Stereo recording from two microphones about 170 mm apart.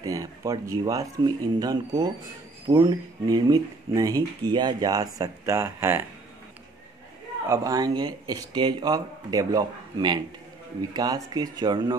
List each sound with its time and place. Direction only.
0.0 s speech: 20° right (ahead or behind)
7.4 s speech: 20° right (ahead or behind)